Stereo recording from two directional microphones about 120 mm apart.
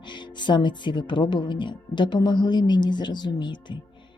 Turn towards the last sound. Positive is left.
turn(degrees=40)  # may be behind; listen again after turning